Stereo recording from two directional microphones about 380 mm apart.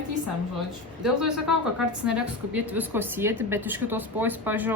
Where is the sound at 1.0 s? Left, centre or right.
Centre.